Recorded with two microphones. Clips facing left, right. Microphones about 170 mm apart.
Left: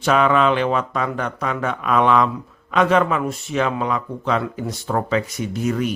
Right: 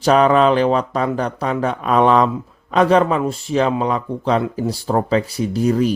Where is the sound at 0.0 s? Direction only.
35° right (ahead or behind).